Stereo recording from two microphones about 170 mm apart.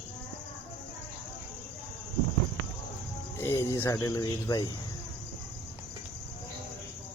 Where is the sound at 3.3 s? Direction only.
15° left (ahead or behind).